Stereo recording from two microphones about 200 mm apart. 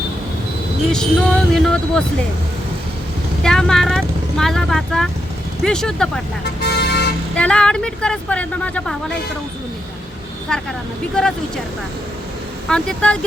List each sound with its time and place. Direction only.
0.9 s speech: 5° left (ahead or behind)
3.4 s speech: 5° left (ahead or behind)
6.4 s vehicle: 55° left (ahead or behind)
7.3 s speech: 5° left (ahead or behind)
10.5 s speech: 5° left (ahead or behind)
12.6 s speech: 5° left (ahead or behind)